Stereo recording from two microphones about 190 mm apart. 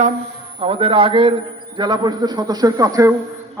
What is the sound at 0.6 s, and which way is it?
A man's voice, 30° right (ahead or behind).